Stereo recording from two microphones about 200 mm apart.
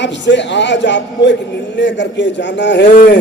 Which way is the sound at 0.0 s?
60° left (ahead or behind).